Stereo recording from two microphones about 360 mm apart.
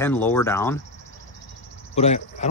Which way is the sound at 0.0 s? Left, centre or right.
Centre.